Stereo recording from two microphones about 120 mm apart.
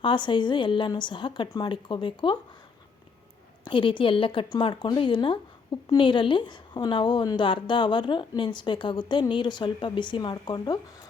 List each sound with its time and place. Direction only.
0.0 s a woman's voice: 40° left (ahead or behind)
3.6 s a woman's voice: 45° left (ahead or behind)